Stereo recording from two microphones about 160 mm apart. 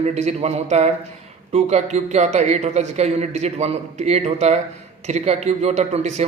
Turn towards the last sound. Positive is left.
turn(degrees=-45)  # may be behind; listen again after turning